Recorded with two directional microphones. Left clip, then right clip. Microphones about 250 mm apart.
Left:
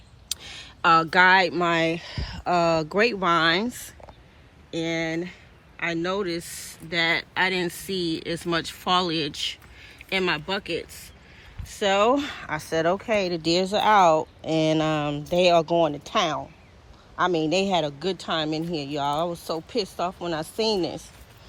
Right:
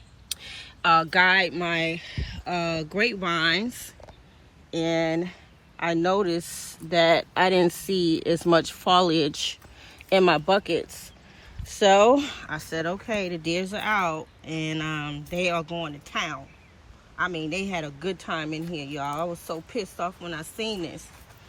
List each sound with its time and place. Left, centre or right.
0.3 s a sound: centre
1.1 s speech: centre
17.2 s speech: centre
19.7 s speech: centre